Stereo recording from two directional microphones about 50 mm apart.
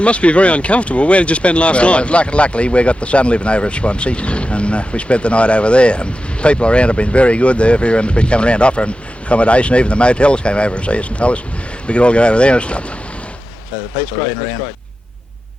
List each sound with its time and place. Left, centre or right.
0.0 s speech: left